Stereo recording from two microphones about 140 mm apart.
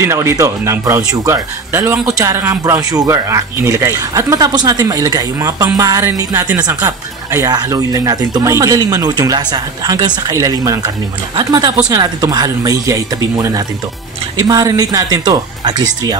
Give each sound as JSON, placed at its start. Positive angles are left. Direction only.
{"t": 0.0, "sound": "speech", "side_deg": -20}